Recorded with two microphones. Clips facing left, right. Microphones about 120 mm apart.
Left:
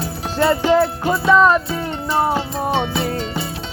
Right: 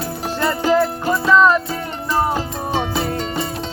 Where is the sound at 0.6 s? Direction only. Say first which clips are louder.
Left 1 dB; centre (ahead or behind).